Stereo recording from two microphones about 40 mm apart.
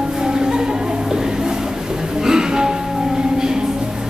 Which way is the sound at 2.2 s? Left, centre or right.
Centre.